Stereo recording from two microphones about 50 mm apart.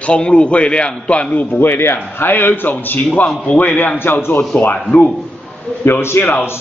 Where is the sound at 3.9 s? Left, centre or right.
Left.